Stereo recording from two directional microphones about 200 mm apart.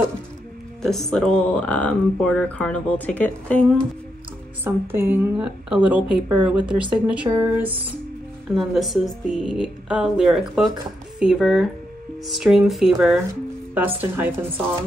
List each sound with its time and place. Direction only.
0.8 s speech: centre (ahead or behind)
4.6 s a woman's voice: 10° right (ahead or behind)
8.5 s a woman's voice: centre (ahead or behind)